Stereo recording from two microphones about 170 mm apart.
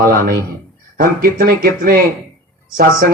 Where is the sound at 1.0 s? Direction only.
60° right (ahead or behind).